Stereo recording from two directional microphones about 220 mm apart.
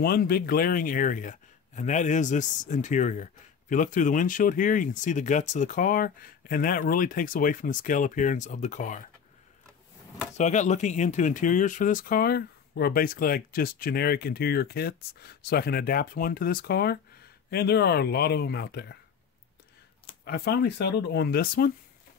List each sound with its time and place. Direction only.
0.0 s a man's voice: 45° left (ahead or behind)
10.3 s speech: 35° left (ahead or behind); by 18.9 s 50° left (ahead or behind)
20.2 s speech: 45° left (ahead or behind)